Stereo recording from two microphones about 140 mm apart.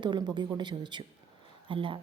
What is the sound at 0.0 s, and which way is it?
A woman's voice, 30° right (ahead or behind).